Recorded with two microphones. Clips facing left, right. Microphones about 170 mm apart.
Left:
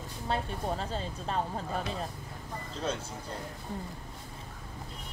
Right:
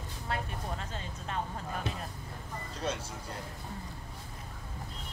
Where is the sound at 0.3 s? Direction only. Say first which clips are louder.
Left 5 dB; 30° left (ahead or behind).